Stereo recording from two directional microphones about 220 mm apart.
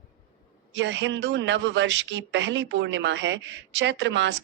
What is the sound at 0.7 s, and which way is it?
A man's voice, 55° right (ahead or behind).